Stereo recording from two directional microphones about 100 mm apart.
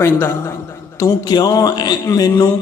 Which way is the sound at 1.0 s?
40° left (ahead or behind).